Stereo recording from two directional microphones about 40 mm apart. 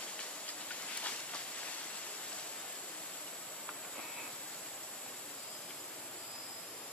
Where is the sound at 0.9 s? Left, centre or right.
Left.